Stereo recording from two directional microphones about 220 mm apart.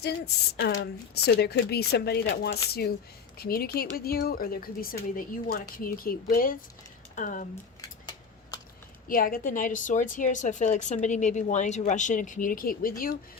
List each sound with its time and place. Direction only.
0.0 s a woman's voice: 50° left (ahead or behind)
7.8 s a sound: 15° left (ahead or behind)
9.0 s a woman's voice: 40° left (ahead or behind)